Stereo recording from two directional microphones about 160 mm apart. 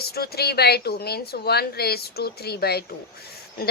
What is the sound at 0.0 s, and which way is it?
A woman's voice, 80° left.